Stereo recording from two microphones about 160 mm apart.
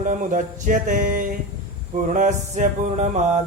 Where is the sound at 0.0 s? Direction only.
55° right (ahead or behind).